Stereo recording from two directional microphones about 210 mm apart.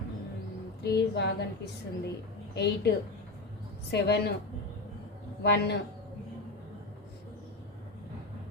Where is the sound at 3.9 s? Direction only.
50° left (ahead or behind).